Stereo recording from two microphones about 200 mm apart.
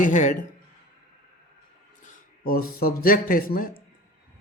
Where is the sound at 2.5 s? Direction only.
45° left (ahead or behind).